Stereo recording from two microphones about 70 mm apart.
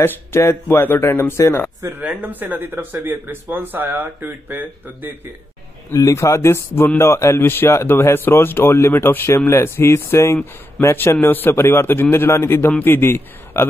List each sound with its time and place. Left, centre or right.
0.0 s speech: left
2.0 s speech: right
5.9 s speech: left
11.0 s speech: left